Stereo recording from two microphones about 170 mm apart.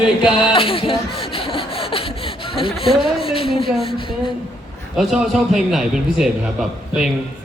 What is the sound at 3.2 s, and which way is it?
Speech, 35° left (ahead or behind).